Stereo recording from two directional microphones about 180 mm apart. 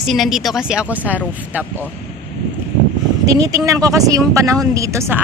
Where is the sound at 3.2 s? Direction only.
20° right (ahead or behind).